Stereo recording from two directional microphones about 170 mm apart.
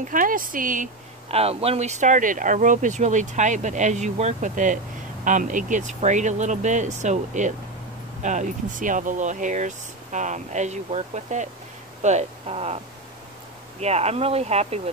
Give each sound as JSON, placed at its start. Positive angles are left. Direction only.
{"t": 0.1, "sound": "speech", "side_deg": -55}
{"t": 1.3, "sound": "speech", "side_deg": -35}